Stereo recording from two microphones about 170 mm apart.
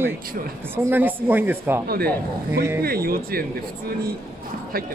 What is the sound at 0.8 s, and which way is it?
Speech, 10° right (ahead or behind).